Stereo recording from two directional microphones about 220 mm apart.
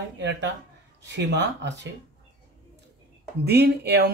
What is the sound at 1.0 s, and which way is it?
Speech, 55° right (ahead or behind).